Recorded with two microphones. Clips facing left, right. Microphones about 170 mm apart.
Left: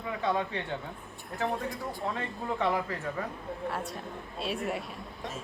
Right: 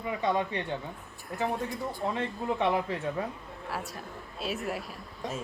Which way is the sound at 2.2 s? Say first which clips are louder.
Right 2 dB; 20° right (ahead or behind).